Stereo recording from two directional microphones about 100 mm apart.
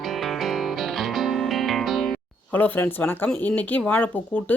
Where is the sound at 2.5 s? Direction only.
20° left (ahead or behind).